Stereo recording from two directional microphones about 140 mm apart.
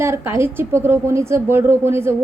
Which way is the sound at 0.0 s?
20° right (ahead or behind).